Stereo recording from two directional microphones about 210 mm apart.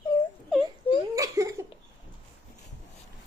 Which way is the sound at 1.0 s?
15° right (ahead or behind).